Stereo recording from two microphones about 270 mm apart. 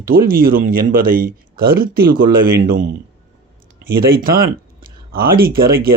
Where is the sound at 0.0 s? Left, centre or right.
Right.